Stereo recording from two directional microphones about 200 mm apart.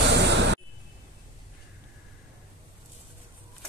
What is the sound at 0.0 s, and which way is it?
Vehicle, 60° right (ahead or behind).